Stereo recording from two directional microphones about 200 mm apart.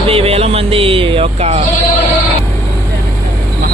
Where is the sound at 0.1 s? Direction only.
30° right (ahead or behind).